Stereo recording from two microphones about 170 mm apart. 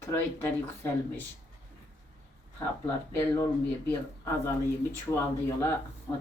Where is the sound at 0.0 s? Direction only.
15° left (ahead or behind).